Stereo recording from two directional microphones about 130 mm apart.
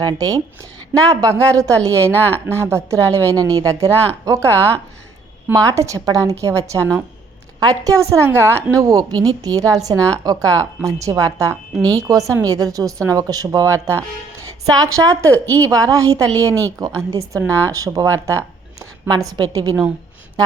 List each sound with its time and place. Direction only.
0.0 s a woman's voice: 30° right (ahead or behind)